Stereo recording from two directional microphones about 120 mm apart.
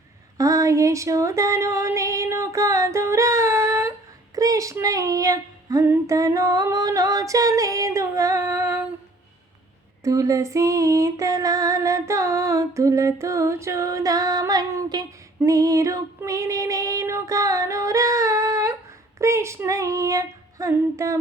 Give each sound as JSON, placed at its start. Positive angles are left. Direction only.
{"t": 0.3, "sound": "female singing", "side_deg": -30}
{"t": 5.9, "sound": "humming", "side_deg": -25}
{"t": 10.0, "sound": "music", "side_deg": -25}
{"t": 15.4, "sound": "female singing", "side_deg": -25}
{"t": 19.2, "sound": "music", "side_deg": -25}